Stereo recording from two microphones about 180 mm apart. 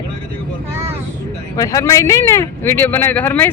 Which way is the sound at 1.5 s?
20° left (ahead or behind).